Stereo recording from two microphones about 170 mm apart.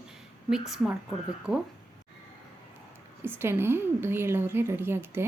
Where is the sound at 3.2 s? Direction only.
15° right (ahead or behind).